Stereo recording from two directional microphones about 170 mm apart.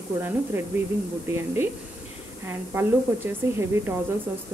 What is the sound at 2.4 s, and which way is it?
Speech, 15° right (ahead or behind).